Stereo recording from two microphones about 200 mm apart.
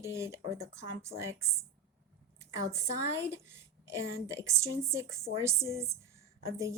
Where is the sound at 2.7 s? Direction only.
15° right (ahead or behind).